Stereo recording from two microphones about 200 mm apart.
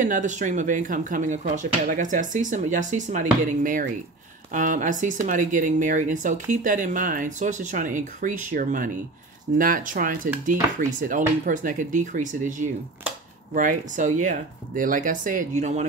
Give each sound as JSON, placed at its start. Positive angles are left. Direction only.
{"t": 0.0, "sound": "speech", "side_deg": -40}